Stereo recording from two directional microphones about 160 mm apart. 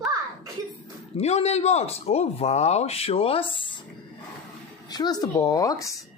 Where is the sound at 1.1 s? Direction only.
40° left (ahead or behind).